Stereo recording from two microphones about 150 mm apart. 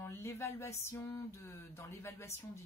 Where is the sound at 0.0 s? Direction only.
15° left (ahead or behind).